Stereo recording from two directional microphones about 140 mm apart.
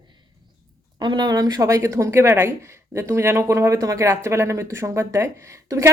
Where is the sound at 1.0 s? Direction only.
30° right (ahead or behind).